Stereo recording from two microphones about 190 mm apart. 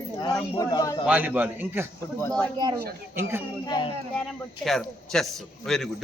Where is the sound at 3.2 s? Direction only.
10° right (ahead or behind).